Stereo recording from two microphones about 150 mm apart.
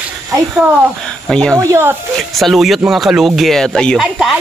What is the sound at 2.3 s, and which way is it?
Speech, centre (ahead or behind).